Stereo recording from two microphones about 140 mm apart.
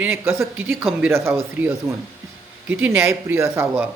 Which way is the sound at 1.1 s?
20° right (ahead or behind).